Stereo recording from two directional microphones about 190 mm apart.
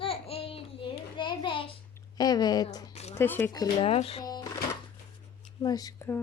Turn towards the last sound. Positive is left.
turn(degrees=15)  # may be behind; listen again after turning